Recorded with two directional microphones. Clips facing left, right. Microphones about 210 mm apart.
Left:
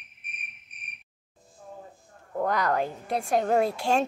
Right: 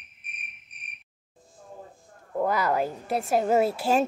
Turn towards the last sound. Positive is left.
turn(degrees=-5)  # may be behind; listen again after turning